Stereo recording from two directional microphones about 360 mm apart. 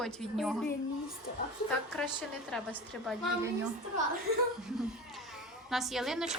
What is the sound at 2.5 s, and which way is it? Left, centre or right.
Speech, centre.